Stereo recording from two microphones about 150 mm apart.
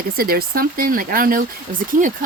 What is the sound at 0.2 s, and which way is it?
Speech, 80° right.